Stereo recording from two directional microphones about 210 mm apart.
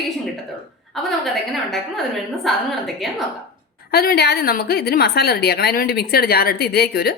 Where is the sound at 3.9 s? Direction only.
50° left (ahead or behind).